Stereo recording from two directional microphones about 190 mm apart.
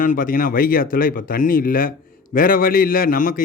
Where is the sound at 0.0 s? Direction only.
45° left (ahead or behind).